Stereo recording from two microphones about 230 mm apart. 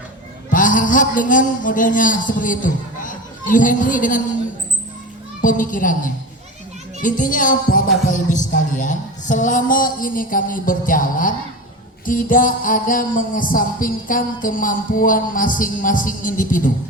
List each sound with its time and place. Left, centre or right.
0.5 s music: left
5.4 s music: left